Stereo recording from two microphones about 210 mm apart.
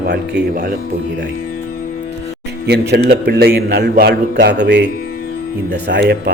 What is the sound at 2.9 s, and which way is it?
A man's voice, 50° right (ahead or behind).